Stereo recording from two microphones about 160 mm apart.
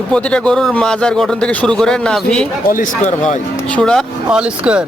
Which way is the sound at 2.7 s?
60° left (ahead or behind).